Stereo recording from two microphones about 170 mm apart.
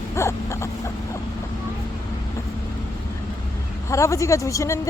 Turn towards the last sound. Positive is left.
turn(degrees=20)  # may be behind; listen again after turning